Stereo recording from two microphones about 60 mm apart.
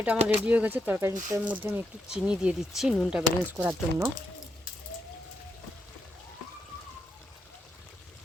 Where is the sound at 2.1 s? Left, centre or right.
Centre.